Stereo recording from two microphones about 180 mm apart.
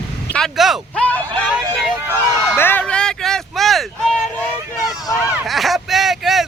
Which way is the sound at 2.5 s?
10° left (ahead or behind).